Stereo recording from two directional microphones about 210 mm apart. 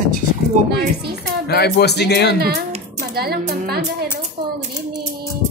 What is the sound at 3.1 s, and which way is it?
Speech, 45° right (ahead or behind).